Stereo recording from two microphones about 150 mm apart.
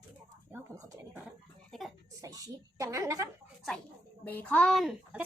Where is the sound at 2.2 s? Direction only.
25° right (ahead or behind).